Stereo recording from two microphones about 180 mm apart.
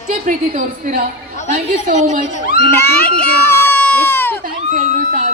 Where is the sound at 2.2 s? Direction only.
40° left (ahead or behind).